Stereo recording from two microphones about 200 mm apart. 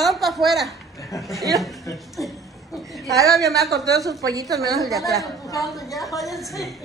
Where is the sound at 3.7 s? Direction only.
15° right (ahead or behind).